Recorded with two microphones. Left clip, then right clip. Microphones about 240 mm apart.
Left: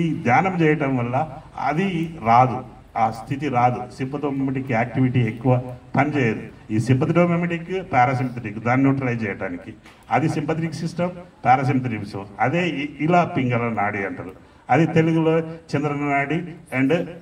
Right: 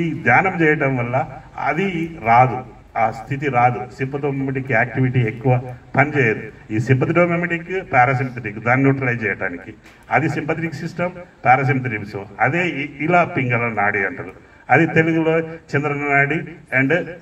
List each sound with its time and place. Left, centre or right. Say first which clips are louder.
0.0 s a man's voice: right 3 dB; left